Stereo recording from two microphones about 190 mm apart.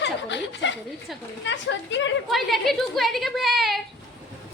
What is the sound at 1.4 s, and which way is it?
Speech, 70° left (ahead or behind).